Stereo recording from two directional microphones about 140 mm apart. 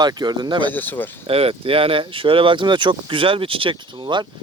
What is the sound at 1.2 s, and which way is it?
Speech, 45° right (ahead or behind).